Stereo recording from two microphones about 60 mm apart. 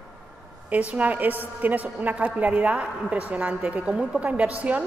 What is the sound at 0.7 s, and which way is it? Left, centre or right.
A woman's voice, right.